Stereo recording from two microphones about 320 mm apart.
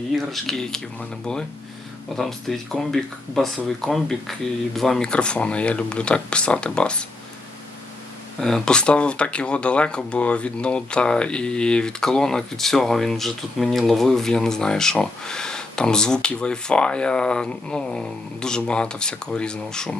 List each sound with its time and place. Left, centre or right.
0.3 s speech: centre
8.4 s speech: centre